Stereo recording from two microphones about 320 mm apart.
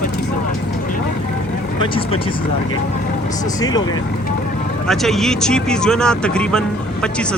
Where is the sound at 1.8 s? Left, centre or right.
Centre.